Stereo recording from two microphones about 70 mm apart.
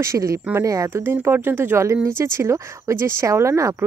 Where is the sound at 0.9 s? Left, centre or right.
Right.